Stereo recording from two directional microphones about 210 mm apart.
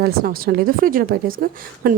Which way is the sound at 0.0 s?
45° right (ahead or behind).